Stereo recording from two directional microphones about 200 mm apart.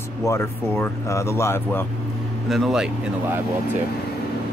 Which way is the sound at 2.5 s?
Centre (ahead or behind).